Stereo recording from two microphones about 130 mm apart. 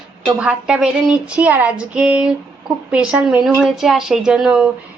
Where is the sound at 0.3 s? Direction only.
10° right (ahead or behind).